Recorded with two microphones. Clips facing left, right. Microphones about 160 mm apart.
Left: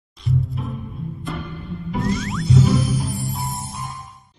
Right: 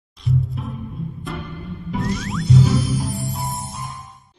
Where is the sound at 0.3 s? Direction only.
Centre (ahead or behind).